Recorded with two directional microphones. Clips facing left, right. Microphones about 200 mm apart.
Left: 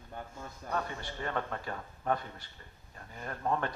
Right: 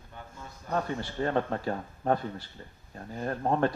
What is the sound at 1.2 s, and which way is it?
Speech, 35° right (ahead or behind).